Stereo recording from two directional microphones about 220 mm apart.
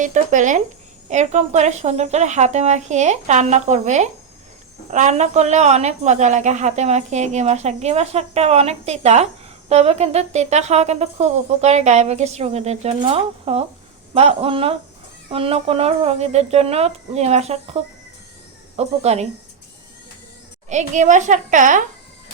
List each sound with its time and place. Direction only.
0.0 s a woman's voice: 35° right (ahead or behind)
18.8 s speech: 30° right (ahead or behind)
20.7 s a woman's voice: 35° right (ahead or behind)